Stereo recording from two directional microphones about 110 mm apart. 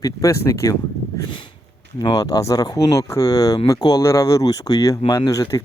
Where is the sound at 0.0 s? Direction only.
30° left (ahead or behind).